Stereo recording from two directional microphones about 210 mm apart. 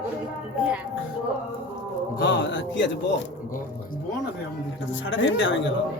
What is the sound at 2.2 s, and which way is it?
Speech, 60° left (ahead or behind).